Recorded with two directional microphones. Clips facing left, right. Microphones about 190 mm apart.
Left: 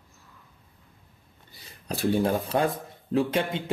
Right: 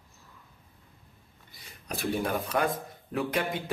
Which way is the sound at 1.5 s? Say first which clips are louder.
Left 4 dB; 30° left (ahead or behind).